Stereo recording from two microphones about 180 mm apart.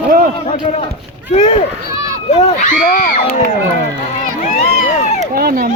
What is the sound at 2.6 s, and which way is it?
Speech, 50° left (ahead or behind).